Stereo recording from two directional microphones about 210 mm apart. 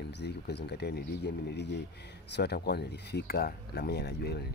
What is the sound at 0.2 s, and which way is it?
Speech, 50° left (ahead or behind).